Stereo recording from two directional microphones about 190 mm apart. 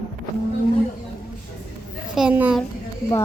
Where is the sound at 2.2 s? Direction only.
5° right (ahead or behind).